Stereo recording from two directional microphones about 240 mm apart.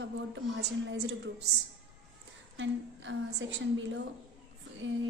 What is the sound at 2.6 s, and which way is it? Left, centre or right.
A woman's voice, right.